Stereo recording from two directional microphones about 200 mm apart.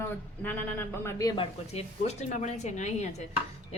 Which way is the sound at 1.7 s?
35° left (ahead or behind).